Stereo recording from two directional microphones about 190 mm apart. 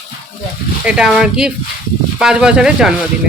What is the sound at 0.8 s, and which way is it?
A woman's voice, 5° right (ahead or behind).